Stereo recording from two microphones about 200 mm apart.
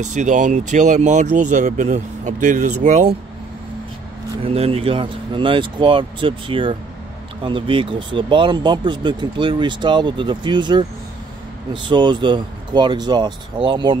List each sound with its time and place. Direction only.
0.0 s speech: 35° right (ahead or behind)
4.4 s speech: 30° right (ahead or behind)